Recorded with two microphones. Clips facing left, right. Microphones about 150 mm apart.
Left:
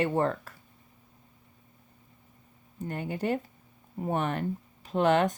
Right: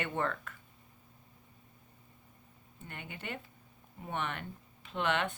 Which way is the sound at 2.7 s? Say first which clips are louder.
Left 13 dB; 40° left (ahead or behind).